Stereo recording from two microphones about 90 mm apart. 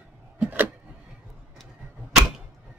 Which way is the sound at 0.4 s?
20° right (ahead or behind).